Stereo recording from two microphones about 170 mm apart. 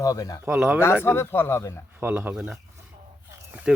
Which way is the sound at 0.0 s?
20° left (ahead or behind).